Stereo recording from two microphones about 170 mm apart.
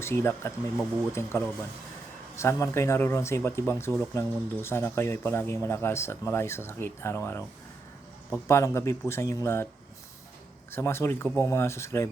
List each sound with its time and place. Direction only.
0.0 s speech: 15° left (ahead or behind)
10.7 s speech: 15° left (ahead or behind)